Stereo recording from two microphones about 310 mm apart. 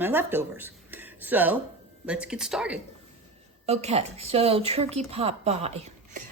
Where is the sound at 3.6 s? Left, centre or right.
Right.